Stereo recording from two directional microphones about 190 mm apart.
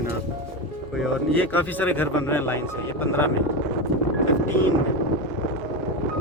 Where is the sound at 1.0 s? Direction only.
5° left (ahead or behind).